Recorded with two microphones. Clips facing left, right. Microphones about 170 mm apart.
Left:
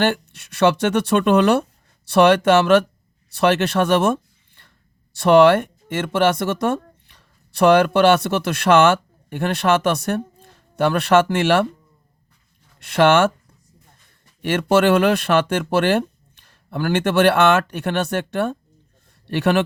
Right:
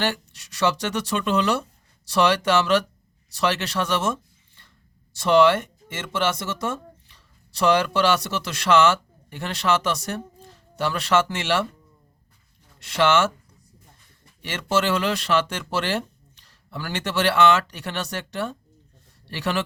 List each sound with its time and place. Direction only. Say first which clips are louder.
0.0 s speech: left 6 dB; 55° left (ahead or behind)
12.8 s speech: left 5 dB; 55° left (ahead or behind)
14.4 s speech: left 8 dB; 55° left (ahead or behind)